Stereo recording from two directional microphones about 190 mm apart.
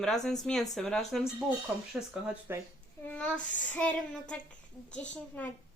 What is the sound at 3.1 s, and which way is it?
A woman's voice, 5° left (ahead or behind).